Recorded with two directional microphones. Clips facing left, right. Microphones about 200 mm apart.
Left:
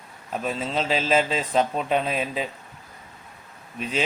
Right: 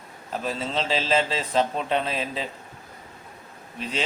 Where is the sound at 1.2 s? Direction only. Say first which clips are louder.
Left 2 dB; 30° right (ahead or behind).